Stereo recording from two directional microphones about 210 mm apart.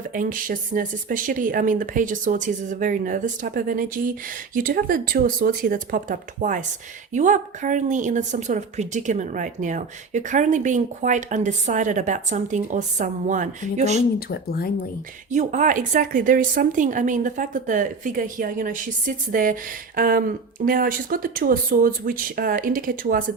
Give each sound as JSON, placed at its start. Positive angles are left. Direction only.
{"t": 0.1, "sound": "a woman's voice", "side_deg": -40}
{"t": 14.3, "sound": "speech", "side_deg": 45}
{"t": 15.3, "sound": "a woman's voice", "side_deg": -35}